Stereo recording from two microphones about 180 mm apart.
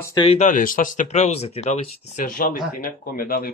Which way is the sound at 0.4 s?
45° left (ahead or behind).